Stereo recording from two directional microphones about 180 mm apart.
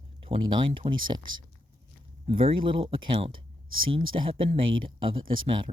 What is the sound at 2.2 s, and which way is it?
Speech, 30° right (ahead or behind).